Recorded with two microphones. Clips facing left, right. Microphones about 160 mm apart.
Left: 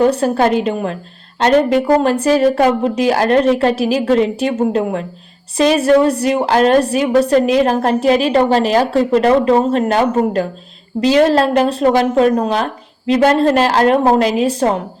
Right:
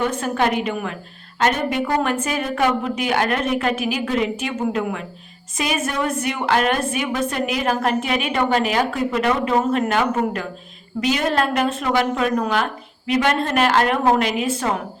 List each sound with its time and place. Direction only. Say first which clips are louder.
0.0 s a woman's voice: left 8 dB; 35° left (ahead or behind)